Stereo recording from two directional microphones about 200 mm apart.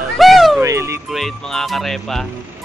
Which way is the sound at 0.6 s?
15° right (ahead or behind).